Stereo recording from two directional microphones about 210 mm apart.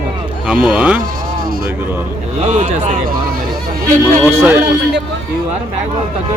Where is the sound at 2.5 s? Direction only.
35° right (ahead or behind).